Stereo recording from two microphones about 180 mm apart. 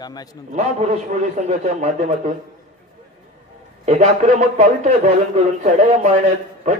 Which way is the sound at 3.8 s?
40° right (ahead or behind).